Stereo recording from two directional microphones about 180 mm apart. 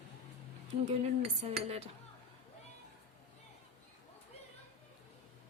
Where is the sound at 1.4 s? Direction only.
35° right (ahead or behind).